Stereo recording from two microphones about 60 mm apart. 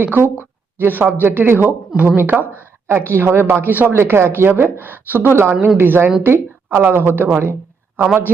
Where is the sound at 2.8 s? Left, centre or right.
Right.